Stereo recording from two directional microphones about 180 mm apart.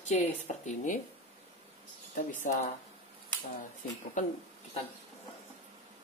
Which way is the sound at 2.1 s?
45° left (ahead or behind).